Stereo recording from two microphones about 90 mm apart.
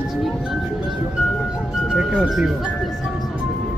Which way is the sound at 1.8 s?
10° right (ahead or behind).